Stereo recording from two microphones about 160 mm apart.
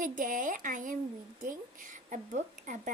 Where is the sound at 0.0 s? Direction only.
55° right (ahead or behind).